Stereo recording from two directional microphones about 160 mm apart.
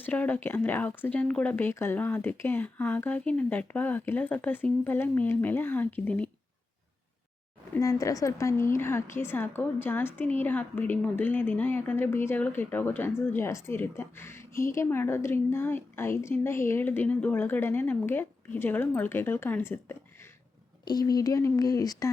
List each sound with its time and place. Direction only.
0.0 s a woman's voice: 10° left (ahead or behind)
7.7 s a woman's voice: 20° left (ahead or behind)
20.8 s speech: 25° left (ahead or behind)